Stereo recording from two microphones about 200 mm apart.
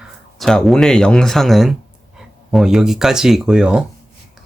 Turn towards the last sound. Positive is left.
turn(degrees=-5)  # may be behind; listen again after turning